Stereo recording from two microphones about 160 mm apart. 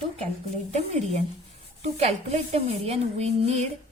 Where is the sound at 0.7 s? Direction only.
40° right (ahead or behind).